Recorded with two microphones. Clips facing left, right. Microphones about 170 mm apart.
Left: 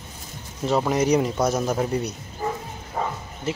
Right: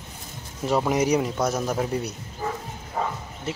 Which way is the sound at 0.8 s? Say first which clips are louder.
Left 2 dB; 10° right (ahead or behind).